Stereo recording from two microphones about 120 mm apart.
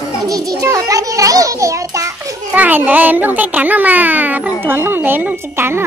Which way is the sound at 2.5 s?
15° right (ahead or behind).